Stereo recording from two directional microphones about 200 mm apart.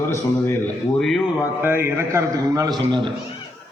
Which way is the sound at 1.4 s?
10° right (ahead or behind).